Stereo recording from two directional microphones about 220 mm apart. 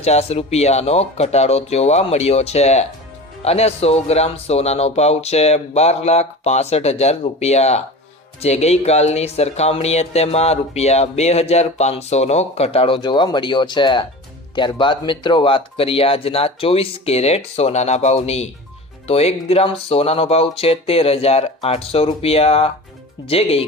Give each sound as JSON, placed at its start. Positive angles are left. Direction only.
{"t": 0.0, "sound": "speech", "side_deg": 30}